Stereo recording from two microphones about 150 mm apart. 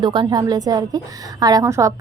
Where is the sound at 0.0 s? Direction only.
30° right (ahead or behind).